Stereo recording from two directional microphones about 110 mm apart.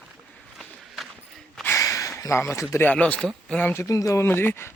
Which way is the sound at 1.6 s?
25° left (ahead or behind).